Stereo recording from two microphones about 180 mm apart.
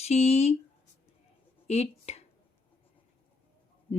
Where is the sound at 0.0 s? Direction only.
35° left (ahead or behind).